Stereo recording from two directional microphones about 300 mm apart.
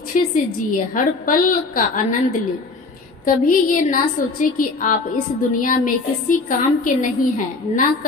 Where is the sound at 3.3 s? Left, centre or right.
Left.